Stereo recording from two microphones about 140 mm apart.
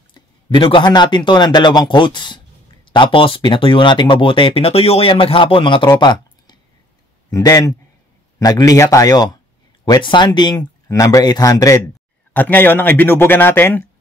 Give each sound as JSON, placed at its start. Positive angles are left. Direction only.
{"t": 0.1, "sound": "speech", "side_deg": 35}
{"t": 12.4, "sound": "a man's voice", "side_deg": 15}